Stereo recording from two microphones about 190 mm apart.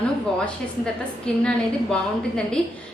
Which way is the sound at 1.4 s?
5° left (ahead or behind).